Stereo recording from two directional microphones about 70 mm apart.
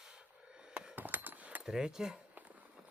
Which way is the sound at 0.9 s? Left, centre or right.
Right.